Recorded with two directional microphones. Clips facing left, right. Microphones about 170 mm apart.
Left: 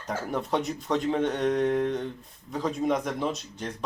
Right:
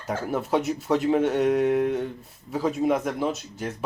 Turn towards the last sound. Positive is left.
turn(degrees=-5)  # may be behind; listen again after turning